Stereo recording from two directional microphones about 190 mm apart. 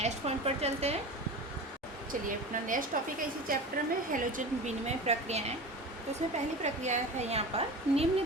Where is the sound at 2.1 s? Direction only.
45° right (ahead or behind).